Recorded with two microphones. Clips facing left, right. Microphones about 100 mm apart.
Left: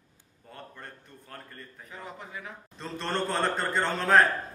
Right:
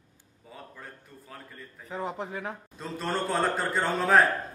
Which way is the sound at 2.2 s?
40° right (ahead or behind).